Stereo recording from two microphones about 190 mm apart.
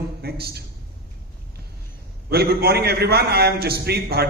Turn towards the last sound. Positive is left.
turn(degrees=-55)  # may be behind; listen again after turning